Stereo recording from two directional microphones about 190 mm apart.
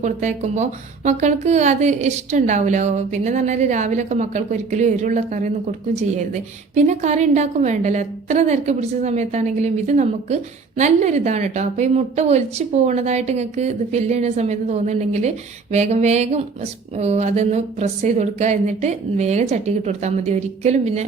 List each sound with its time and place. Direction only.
0.0 s a woman's voice: 40° right (ahead or behind)